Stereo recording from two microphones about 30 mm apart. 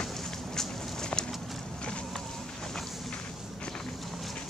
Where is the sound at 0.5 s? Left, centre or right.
Centre.